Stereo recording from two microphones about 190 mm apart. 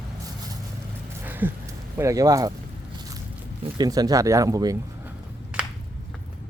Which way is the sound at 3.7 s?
20° right (ahead or behind).